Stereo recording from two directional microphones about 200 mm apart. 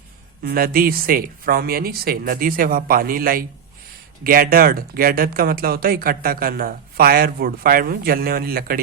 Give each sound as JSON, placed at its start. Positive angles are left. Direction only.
{"t": 0.4, "sound": "speech", "side_deg": -45}